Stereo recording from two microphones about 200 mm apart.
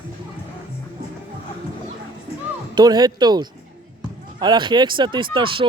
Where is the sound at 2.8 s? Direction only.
20° right (ahead or behind).